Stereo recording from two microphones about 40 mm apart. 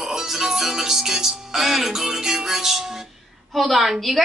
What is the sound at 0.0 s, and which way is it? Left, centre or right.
A woman's voice, centre.